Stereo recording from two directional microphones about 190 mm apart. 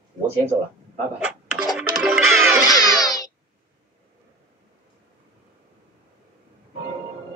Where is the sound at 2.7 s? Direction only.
20° left (ahead or behind).